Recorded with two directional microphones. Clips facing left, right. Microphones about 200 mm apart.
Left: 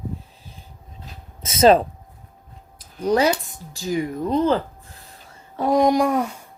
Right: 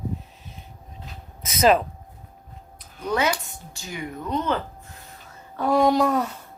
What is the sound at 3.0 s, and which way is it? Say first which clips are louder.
A woman's voice: left 5 dB; 35° left (ahead or behind).